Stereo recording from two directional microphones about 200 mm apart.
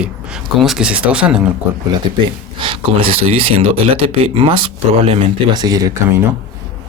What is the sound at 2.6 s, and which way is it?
Speech, 25° right (ahead or behind).